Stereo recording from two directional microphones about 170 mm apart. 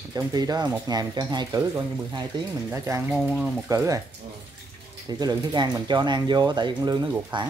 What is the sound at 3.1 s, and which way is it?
Speech, centre (ahead or behind).